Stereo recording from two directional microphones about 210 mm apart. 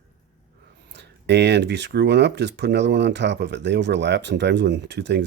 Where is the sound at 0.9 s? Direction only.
55° right (ahead or behind).